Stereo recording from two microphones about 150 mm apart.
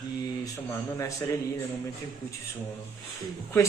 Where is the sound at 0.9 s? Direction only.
20° left (ahead or behind).